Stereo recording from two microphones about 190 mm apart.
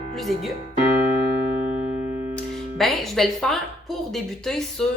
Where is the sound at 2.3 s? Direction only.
Centre (ahead or behind).